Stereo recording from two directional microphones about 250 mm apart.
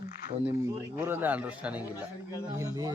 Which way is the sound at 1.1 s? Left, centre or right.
Centre.